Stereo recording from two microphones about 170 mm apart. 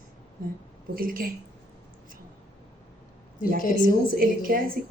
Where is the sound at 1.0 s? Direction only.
60° right (ahead or behind).